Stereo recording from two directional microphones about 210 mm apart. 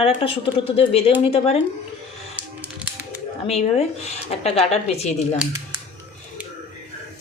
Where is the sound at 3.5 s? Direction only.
30° left (ahead or behind).